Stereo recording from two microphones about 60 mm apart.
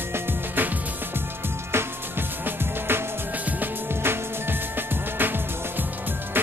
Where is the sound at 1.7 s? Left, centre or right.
Right.